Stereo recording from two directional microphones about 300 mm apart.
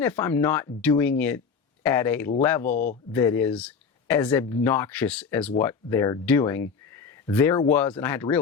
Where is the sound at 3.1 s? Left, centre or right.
Centre.